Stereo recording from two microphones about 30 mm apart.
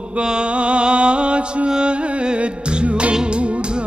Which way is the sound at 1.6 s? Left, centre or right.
Right.